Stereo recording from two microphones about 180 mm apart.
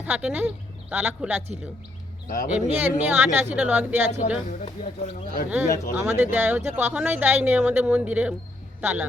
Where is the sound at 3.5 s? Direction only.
5° right (ahead or behind).